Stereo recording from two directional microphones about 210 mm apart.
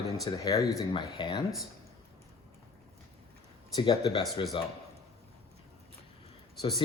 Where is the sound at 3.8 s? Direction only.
20° left (ahead or behind).